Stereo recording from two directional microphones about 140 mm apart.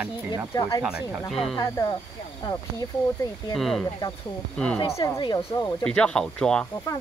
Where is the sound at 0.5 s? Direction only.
30° left (ahead or behind).